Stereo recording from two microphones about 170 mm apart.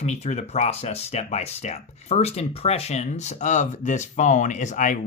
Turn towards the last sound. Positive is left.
turn(degrees=50)  # may be behind; listen again after turning